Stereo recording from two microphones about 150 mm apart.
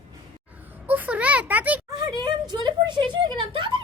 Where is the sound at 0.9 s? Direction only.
10° right (ahead or behind).